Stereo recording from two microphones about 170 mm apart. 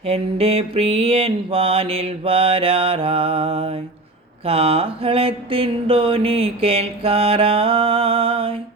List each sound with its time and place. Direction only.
0.0 s mantra: 35° right (ahead or behind)